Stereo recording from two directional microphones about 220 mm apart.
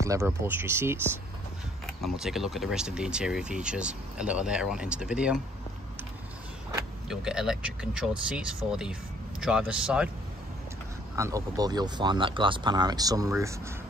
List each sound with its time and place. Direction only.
0.0 s speech: 15° right (ahead or behind)
7.1 s speech: 5° right (ahead or behind)
11.1 s speech: 15° right (ahead or behind)